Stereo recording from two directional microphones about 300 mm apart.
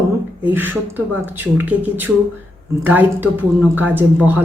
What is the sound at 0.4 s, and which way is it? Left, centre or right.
Speech, centre.